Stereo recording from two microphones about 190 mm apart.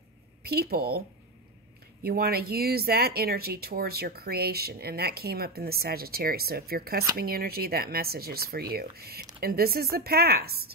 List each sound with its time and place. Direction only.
0.4 s speech: 55° right (ahead or behind)
2.0 s speech: 55° right (ahead or behind)